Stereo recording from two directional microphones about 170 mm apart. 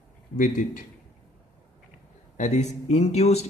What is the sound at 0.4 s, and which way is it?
Speech, 50° left (ahead or behind).